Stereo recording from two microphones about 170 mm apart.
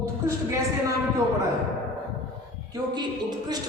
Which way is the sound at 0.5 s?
20° right (ahead or behind).